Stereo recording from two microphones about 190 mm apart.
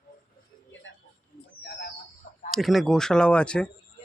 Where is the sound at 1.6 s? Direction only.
60° left (ahead or behind).